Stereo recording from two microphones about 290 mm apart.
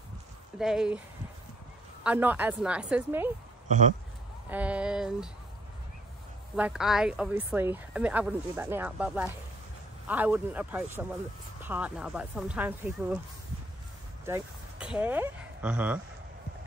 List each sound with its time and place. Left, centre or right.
0.6 s speech: centre
2.0 s speech: centre
3.6 s speech: right
4.5 s speech: centre
6.5 s speech: centre
14.2 s speech: centre